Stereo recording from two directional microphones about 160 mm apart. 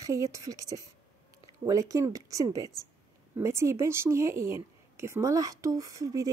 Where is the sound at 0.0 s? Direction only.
20° right (ahead or behind).